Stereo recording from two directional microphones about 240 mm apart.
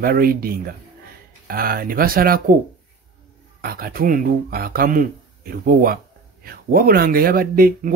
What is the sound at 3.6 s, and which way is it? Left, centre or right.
Speech, right.